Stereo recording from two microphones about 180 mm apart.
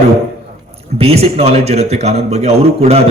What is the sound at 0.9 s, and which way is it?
A man's voice, 35° right (ahead or behind).